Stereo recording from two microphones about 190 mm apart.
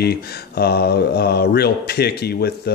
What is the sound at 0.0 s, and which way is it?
Speech, 55° left (ahead or behind).